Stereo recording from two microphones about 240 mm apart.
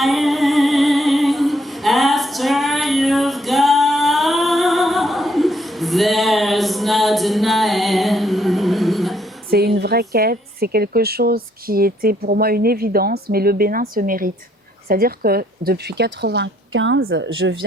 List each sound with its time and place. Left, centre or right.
0.0 s music: centre
9.5 s a woman's voice: right